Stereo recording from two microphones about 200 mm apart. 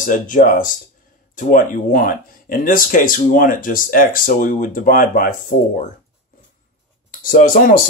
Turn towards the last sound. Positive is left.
turn(degrees=45)  # may be behind; listen again after turning